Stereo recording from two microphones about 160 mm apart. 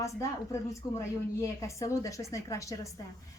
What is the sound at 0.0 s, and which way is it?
Speech, 20° left (ahead or behind).